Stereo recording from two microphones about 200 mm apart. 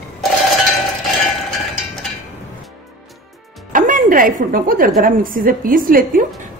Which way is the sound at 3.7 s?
40° right (ahead or behind).